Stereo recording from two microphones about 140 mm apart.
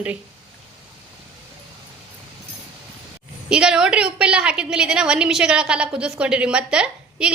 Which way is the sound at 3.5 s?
5° right (ahead or behind).